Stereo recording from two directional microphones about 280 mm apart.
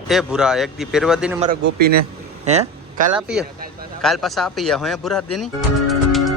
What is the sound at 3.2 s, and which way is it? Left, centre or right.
Speech, centre.